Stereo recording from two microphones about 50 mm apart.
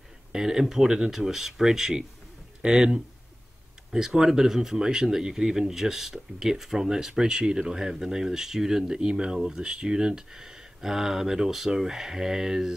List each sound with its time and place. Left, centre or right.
0.3 s speech: centre